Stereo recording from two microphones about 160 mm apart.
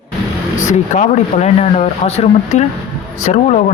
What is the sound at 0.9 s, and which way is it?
Speech, 45° left (ahead or behind).